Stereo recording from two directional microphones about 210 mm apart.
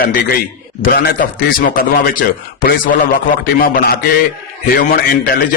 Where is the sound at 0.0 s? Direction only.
45° left (ahead or behind).